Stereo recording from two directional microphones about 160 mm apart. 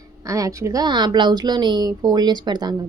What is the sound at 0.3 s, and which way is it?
A woman's voice, 20° right (ahead or behind).